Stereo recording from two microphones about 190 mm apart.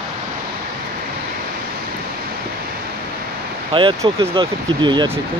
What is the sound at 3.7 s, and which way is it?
Speech, 25° right (ahead or behind).